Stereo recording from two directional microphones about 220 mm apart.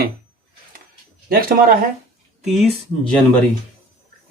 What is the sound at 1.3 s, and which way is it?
Speech, 40° right (ahead or behind).